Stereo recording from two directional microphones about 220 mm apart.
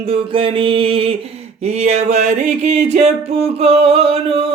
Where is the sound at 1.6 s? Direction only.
30° right (ahead or behind).